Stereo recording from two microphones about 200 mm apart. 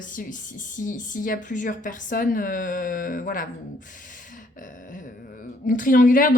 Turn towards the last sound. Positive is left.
turn(degrees=45)  # may be behind; listen again after turning